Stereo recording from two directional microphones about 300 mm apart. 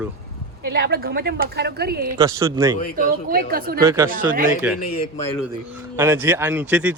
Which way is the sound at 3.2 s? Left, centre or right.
Right.